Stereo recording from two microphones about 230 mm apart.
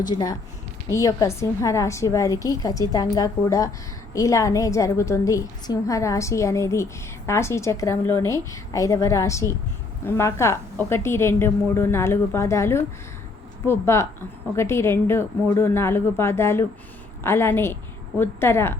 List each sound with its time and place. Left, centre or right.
0.0 s a woman's voice: centre